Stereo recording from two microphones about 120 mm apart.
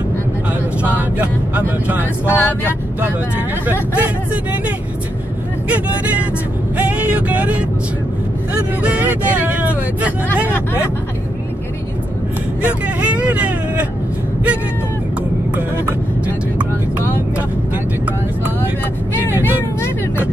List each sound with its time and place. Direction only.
1.1 s speech: 10° right (ahead or behind)
2.2 s speech: 15° left (ahead or behind)
4.0 s speech: 10° right (ahead or behind)
6.8 s vehicle: 10° right (ahead or behind)
8.8 s speech: 10° right (ahead or behind)
13.0 s speech: 10° right (ahead or behind)
19.4 s vehicle: 20° left (ahead or behind)